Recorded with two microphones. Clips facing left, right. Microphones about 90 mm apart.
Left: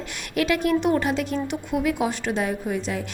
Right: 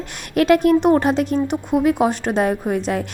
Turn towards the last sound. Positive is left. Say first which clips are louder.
# right 6 dB
turn(degrees=-55)  # may be behind; listen again after turning